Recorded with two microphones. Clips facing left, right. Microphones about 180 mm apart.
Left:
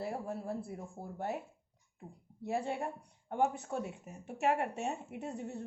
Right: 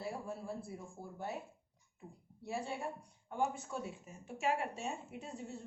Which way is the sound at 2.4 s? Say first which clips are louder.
Left 5 dB; 60° left (ahead or behind).